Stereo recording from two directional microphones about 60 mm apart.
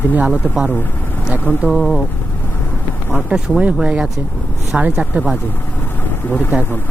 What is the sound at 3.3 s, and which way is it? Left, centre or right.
Speech, right.